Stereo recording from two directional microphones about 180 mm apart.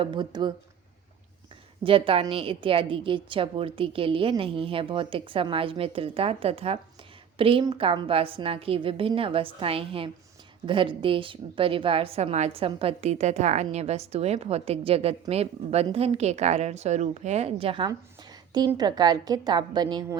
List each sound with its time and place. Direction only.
0.0 s a woman's voice: 25° right (ahead or behind)
1.8 s a woman's voice: 30° right (ahead or behind)